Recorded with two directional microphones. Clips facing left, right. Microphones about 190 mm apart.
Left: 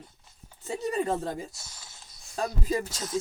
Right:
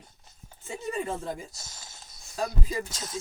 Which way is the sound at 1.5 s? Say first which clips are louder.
Right 2 dB; 45° right (ahead or behind).